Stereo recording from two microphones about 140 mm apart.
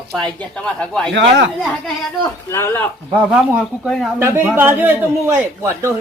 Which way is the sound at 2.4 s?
20° left (ahead or behind).